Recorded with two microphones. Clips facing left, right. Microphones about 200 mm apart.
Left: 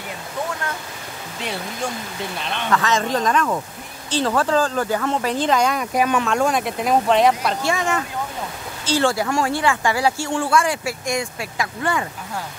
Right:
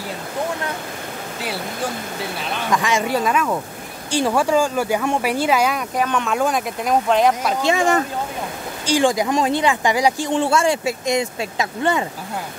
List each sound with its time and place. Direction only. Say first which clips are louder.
1.4 s speech: right 1 dB; 5° right (ahead or behind)
5.9 s speech: left 3 dB; 10° left (ahead or behind)
6.2 s speech: left 1 dB; centre (ahead or behind)
7.6 s speech: right 6 dB; 30° right (ahead or behind)
8.8 s speech: right 2 dB; 15° right (ahead or behind)